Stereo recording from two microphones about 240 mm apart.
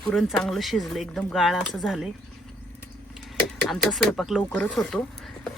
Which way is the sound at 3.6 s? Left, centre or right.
Centre.